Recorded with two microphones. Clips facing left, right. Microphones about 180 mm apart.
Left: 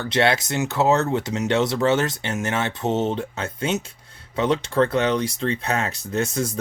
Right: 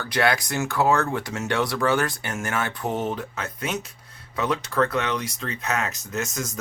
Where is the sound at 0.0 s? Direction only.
25° left (ahead or behind).